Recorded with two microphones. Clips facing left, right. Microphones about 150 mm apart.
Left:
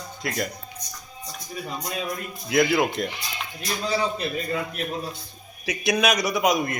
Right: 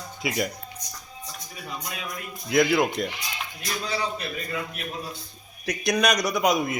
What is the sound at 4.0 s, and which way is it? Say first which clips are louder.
Speech: left 4 dB; 30° left (ahead or behind).